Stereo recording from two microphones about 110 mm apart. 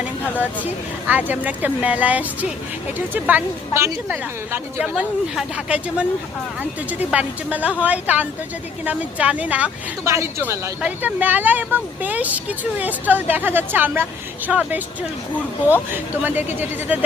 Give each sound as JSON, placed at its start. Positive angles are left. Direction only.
{"t": 0.0, "sound": "speech", "side_deg": -15}
{"t": 10.0, "sound": "a woman's voice", "side_deg": -25}
{"t": 15.9, "sound": "speech", "side_deg": -15}